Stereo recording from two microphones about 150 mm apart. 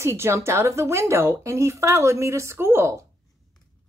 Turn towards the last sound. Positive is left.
turn(degrees=-20)  # may be behind; listen again after turning